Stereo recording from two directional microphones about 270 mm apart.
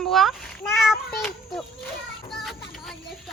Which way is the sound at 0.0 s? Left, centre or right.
Centre.